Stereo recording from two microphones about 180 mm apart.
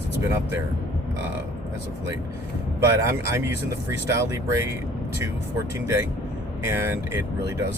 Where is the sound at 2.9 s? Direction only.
15° right (ahead or behind).